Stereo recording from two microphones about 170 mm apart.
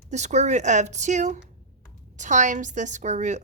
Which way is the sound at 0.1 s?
45° right (ahead or behind).